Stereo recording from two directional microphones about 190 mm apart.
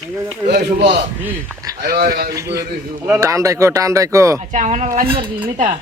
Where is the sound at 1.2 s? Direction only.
15° right (ahead or behind).